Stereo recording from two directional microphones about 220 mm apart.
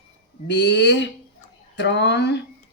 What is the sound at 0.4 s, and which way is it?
A woman's voice, 50° left (ahead or behind).